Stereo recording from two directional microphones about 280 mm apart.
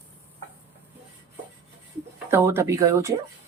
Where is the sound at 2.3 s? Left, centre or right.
Centre.